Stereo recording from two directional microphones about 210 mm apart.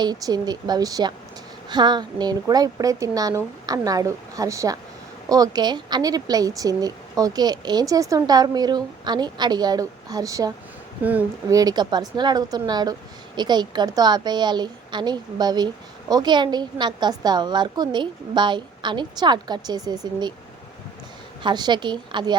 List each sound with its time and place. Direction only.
0.0 s a woman's voice: 20° right (ahead or behind)
21.4 s a woman's voice: 20° right (ahead or behind)